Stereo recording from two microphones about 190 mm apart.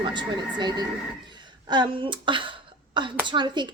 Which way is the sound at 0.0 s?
25° right (ahead or behind).